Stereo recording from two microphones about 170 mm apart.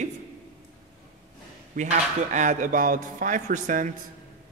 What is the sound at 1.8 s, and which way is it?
Sanding, 45° right (ahead or behind).